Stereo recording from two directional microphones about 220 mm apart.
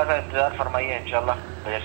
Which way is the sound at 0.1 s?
10° right (ahead or behind).